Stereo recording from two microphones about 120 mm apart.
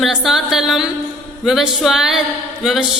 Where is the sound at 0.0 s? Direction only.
Centre (ahead or behind).